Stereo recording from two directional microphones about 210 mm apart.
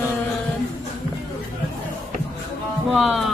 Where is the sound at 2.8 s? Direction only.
Centre (ahead or behind).